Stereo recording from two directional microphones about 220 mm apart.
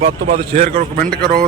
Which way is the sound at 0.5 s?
30° right (ahead or behind).